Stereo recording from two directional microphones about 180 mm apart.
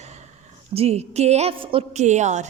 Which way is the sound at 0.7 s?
35° right (ahead or behind).